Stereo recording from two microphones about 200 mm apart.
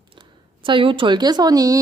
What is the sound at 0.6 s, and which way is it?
A woman's voice, 25° right (ahead or behind).